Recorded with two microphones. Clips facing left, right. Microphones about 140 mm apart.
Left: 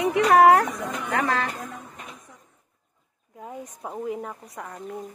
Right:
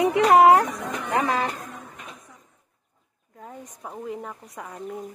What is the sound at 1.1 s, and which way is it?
Music, 20° right (ahead or behind).